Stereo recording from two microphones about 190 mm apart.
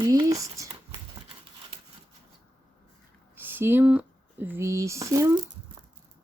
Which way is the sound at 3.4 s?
10° right (ahead or behind).